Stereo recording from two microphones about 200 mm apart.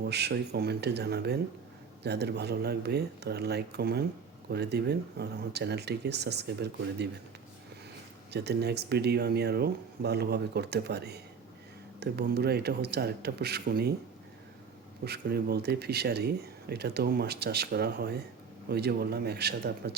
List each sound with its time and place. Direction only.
0.0 s speech: 55° right (ahead or behind)
8.3 s speech: 55° right (ahead or behind)
15.0 s speech: 55° right (ahead or behind)